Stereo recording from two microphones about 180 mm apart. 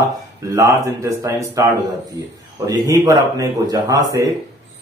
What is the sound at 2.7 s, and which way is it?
Speech, 20° right (ahead or behind).